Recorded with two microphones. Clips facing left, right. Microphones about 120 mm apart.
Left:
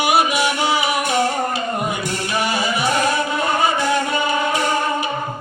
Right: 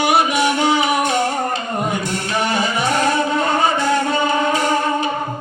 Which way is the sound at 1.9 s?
10° left (ahead or behind).